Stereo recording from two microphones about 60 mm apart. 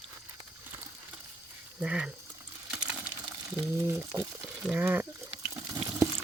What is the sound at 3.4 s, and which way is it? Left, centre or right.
Speech, right.